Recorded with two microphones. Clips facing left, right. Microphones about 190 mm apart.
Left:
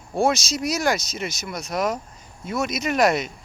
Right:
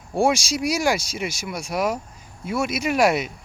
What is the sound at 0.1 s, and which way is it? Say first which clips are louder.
Speech: right 1 dB; 10° right (ahead or behind).